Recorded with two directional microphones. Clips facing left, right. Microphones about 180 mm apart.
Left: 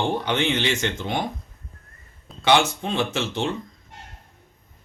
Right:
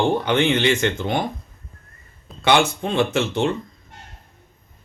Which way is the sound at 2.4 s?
55° right (ahead or behind).